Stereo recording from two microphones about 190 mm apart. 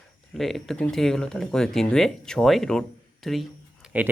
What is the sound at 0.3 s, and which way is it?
Speech, centre (ahead or behind).